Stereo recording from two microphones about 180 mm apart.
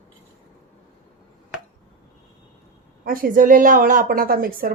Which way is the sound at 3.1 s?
50° right (ahead or behind).